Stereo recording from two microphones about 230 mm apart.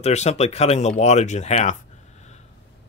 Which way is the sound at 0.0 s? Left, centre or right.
Left.